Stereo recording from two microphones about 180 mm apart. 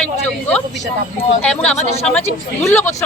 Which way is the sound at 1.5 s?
5° left (ahead or behind).